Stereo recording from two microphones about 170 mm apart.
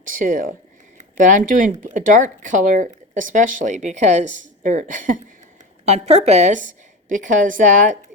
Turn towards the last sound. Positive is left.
turn(degrees=-50)  # may be behind; listen again after turning